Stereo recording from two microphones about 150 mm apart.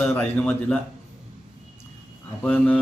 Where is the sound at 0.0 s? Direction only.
15° left (ahead or behind).